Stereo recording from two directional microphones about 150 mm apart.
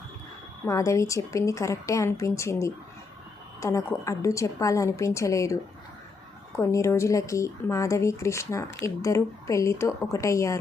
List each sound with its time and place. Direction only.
0.6 s speech: 20° left (ahead or behind)
6.6 s speech: 20° left (ahead or behind)